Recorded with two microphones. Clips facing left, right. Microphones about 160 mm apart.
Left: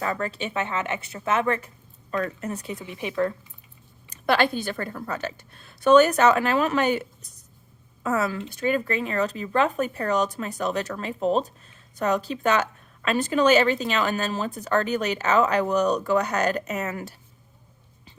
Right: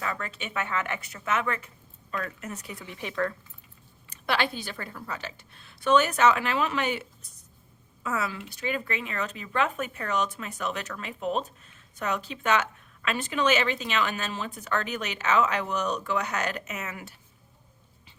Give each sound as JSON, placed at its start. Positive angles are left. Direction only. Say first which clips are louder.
{"t": 0.0, "sound": "a woman's voice", "louder": "left 6 dB", "side_deg": 35}
{"t": 2.7, "sound": "speech", "louder": "left 4 dB", "side_deg": 15}
{"t": 4.1, "sound": "a woman's voice", "louder": "left 6 dB", "side_deg": 45}